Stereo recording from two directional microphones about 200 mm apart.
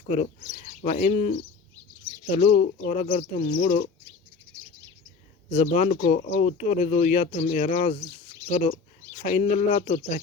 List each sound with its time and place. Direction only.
0.0 s speech: 35° left (ahead or behind)
5.5 s speech: 35° left (ahead or behind)
9.1 s speech: 40° left (ahead or behind)